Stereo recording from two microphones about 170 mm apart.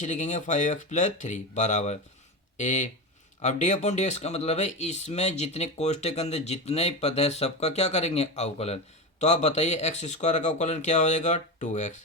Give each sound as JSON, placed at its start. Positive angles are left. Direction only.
{"t": 0.0, "sound": "speech", "side_deg": 45}